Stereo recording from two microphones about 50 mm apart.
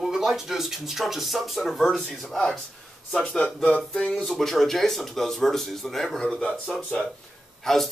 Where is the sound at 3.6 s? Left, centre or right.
Left.